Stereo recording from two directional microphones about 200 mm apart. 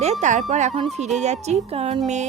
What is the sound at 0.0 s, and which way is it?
Speech, 35° right (ahead or behind).